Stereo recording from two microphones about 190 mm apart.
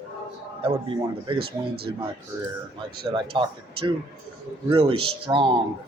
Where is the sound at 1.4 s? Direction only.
55° right (ahead or behind).